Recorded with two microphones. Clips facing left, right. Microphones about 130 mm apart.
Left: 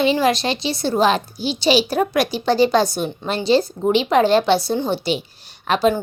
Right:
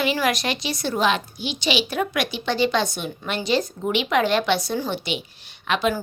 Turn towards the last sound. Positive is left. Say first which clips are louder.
# left 5 dB
turn(degrees=35)  # may be behind; listen again after turning